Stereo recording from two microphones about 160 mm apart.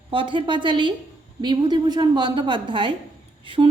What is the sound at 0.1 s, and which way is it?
A woman's voice, 30° right (ahead or behind).